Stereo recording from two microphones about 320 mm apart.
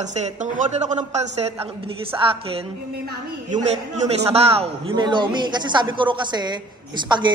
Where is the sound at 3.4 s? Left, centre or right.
Right.